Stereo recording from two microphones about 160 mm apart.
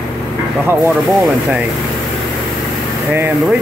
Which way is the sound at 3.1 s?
10° right (ahead or behind).